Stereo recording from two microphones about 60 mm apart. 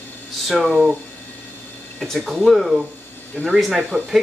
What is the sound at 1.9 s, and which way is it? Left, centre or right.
Speech, centre.